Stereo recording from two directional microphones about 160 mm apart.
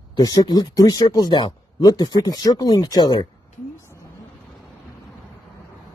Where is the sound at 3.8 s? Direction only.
15° left (ahead or behind).